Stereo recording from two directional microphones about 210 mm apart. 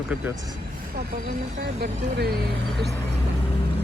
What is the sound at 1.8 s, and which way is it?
Speech, 50° right (ahead or behind).